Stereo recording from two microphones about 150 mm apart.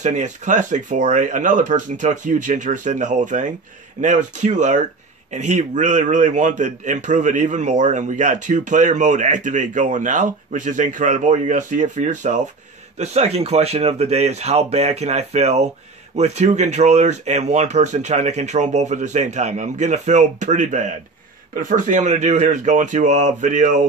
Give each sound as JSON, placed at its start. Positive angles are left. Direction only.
{"t": 0.0, "sound": "a man's voice", "side_deg": -55}